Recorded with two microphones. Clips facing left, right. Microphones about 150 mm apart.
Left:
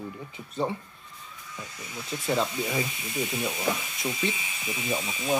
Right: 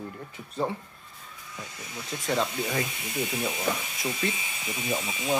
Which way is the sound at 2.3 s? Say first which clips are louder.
Left 1 dB; 5° left (ahead or behind).